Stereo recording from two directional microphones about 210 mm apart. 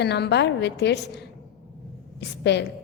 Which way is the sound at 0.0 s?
55° left (ahead or behind).